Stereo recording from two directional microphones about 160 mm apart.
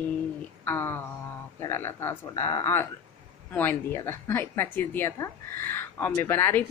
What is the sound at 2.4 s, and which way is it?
Speech, 30° left (ahead or behind).